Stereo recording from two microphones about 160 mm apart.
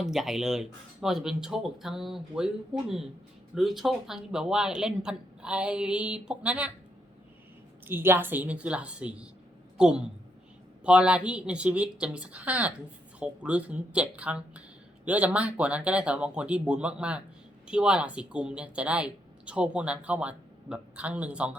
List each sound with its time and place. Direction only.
0.0 s speech: 5° right (ahead or behind)
7.9 s speech: 15° right (ahead or behind)